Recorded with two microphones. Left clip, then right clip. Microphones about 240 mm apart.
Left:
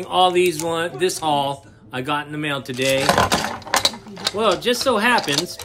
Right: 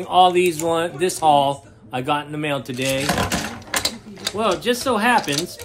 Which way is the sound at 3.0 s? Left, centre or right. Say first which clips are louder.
Left 5 dB; left.